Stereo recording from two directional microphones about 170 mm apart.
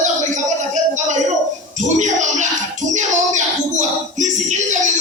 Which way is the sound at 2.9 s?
45° right (ahead or behind).